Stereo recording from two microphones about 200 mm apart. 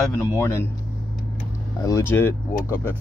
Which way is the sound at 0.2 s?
15° left (ahead or behind).